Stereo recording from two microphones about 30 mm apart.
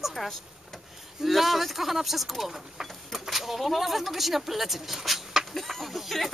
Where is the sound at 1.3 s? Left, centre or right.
Centre.